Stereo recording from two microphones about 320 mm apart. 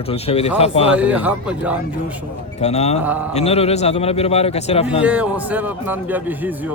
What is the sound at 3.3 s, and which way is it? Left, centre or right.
A man's voice, centre.